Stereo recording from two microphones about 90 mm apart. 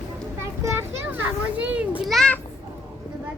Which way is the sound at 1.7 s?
15° right (ahead or behind).